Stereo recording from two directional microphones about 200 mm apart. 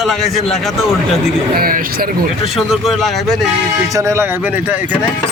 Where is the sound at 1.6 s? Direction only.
45° right (ahead or behind).